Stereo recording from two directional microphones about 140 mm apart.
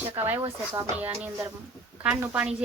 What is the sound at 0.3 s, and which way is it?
Speech, 15° right (ahead or behind).